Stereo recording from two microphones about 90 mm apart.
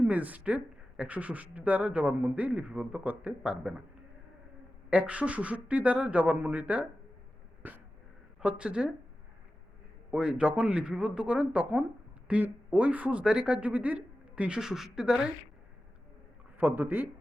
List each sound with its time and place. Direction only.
0.0 s speech: 15° right (ahead or behind)
4.9 s speech: 15° right (ahead or behind)
7.6 s a sound: 20° right (ahead or behind)
8.4 s speech: 10° right (ahead or behind)
10.1 s speech: 10° right (ahead or behind)
16.6 s speech: 20° right (ahead or behind)